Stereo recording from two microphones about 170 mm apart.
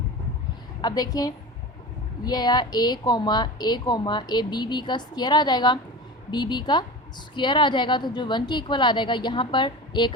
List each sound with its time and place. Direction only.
0.8 s a woman's voice: 25° left (ahead or behind)